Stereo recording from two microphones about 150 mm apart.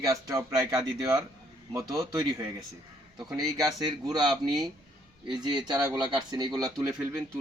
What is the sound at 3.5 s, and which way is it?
Speech, 25° right (ahead or behind).